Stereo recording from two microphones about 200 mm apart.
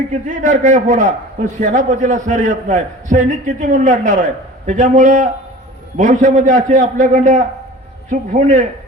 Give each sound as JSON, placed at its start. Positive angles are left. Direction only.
{"t": 0.3, "sound": "a man's voice", "side_deg": -40}